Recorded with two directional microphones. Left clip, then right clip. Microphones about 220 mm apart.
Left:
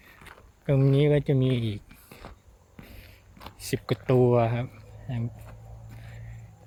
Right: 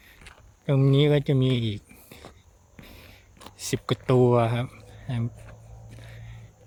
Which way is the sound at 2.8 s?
15° right (ahead or behind).